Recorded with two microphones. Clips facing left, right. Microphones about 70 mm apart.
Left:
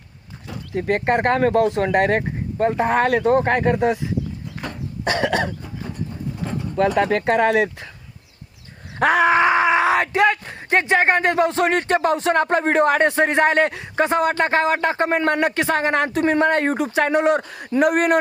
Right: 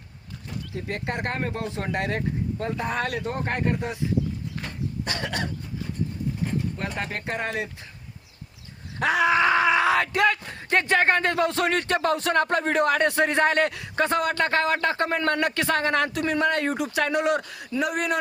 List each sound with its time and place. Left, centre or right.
0.7 s speech: left
1.3 s speech: left
6.7 s speech: left
9.0 s groan: left
9.4 s a man's voice: left